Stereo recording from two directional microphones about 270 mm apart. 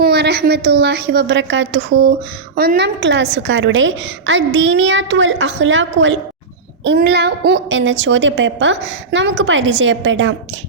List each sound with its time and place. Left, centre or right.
0.0 s a woman's voice: right